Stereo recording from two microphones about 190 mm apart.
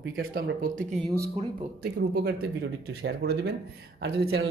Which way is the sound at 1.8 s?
55° right (ahead or behind).